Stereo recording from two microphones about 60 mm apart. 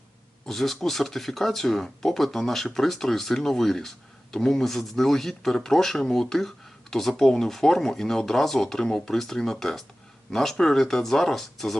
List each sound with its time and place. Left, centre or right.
0.4 s speech: centre